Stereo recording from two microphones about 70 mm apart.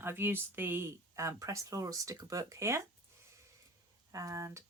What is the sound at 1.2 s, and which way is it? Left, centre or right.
Speech, right.